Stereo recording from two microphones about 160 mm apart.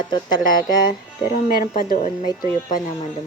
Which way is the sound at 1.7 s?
60° left (ahead or behind).